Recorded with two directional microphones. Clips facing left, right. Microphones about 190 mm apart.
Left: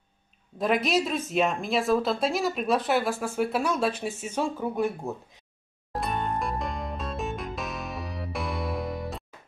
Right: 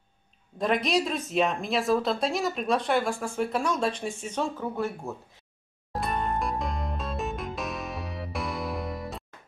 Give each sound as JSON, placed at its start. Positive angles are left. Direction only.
{"t": 0.6, "sound": "a woman's voice", "side_deg": 5}
{"t": 5.9, "sound": "music", "side_deg": 0}